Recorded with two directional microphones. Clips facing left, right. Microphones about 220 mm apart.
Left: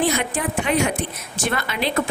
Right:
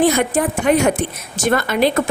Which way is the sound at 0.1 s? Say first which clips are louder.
Right 6 dB; 45° right (ahead or behind).